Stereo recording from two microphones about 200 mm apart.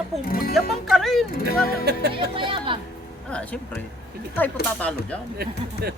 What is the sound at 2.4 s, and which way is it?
Speech, 25° right (ahead or behind).